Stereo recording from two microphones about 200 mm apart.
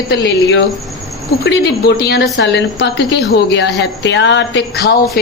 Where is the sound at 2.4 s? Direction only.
60° left (ahead or behind).